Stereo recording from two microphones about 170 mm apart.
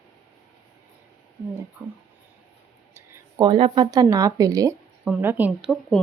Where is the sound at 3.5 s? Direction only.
30° right (ahead or behind).